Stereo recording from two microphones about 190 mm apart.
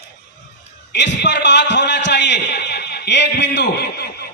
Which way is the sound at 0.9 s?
65° left (ahead or behind).